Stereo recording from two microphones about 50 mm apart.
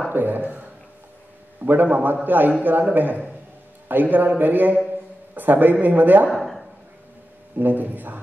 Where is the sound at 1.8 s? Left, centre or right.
Right.